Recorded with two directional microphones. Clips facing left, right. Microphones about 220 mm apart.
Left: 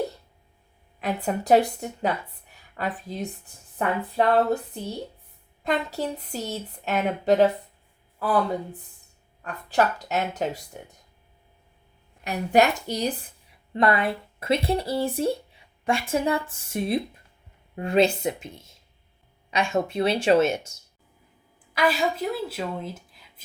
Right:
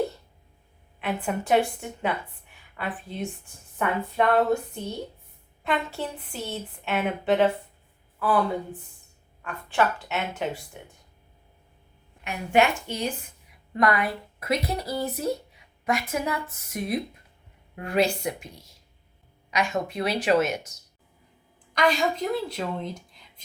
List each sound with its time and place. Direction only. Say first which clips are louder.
1.0 s a woman's voice: left 2 dB; 40° left (ahead or behind)
5.6 s a woman's voice: left 2 dB; 40° left (ahead or behind)
12.2 s a woman's voice: left 2 dB; 40° left (ahead or behind)
21.7 s a woman's voice: even; 5° left (ahead or behind)